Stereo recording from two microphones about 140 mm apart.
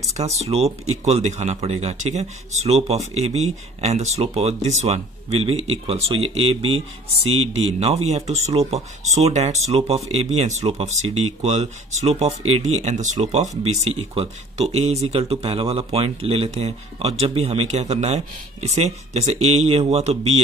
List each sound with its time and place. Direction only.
0.1 s speech: 50° right (ahead or behind)